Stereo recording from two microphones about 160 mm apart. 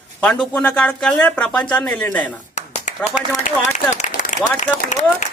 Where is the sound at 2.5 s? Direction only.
50° left (ahead or behind).